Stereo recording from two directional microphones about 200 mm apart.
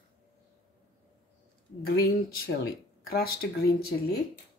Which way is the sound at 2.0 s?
50° left (ahead or behind).